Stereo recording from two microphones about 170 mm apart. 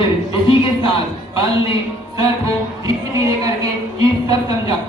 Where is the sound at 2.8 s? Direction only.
20° right (ahead or behind).